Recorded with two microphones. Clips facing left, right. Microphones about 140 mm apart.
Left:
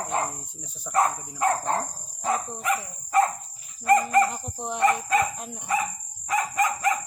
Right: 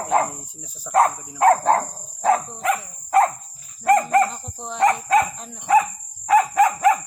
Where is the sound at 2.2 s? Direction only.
75° right (ahead or behind).